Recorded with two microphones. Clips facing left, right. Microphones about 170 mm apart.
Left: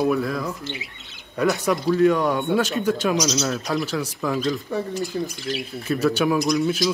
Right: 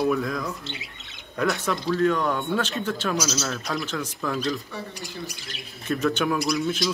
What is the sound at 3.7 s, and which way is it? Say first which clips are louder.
Speech: left 5 dB; 5° left (ahead or behind).